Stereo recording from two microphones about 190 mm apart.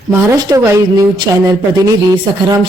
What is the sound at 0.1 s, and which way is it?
Speech, 15° right (ahead or behind).